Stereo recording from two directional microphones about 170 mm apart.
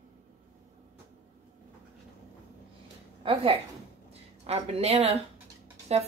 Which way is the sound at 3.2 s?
30° right (ahead or behind).